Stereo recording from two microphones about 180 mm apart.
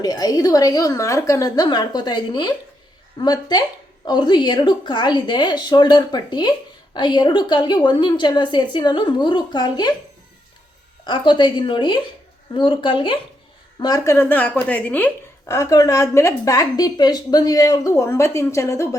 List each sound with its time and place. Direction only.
0.0 s a woman's voice: 20° left (ahead or behind)
11.0 s a woman's voice: 25° left (ahead or behind)